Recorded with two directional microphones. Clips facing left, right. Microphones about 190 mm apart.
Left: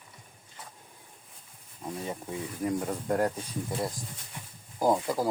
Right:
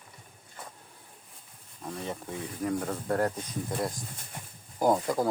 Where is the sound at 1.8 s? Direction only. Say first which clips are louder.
Left 1 dB; 10° left (ahead or behind).